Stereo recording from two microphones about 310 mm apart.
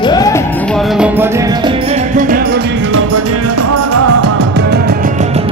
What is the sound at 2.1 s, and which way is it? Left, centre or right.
Music, right.